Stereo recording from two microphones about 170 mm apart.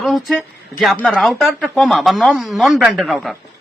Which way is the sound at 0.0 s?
Centre (ahead or behind).